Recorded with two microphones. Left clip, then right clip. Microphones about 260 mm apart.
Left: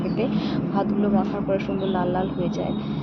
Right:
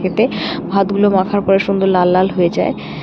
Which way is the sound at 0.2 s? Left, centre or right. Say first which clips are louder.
Right 11 dB; right.